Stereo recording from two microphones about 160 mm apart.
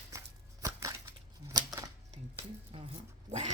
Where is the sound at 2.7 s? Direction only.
35° right (ahead or behind).